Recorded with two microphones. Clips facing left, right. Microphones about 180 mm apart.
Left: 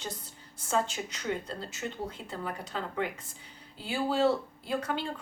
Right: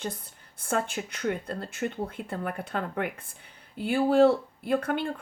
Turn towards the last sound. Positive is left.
turn(degrees=-55)  # may be behind; listen again after turning